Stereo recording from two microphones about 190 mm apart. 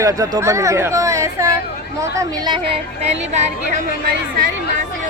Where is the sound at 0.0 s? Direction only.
15° right (ahead or behind).